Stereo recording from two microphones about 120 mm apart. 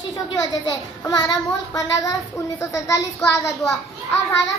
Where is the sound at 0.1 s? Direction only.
30° left (ahead or behind).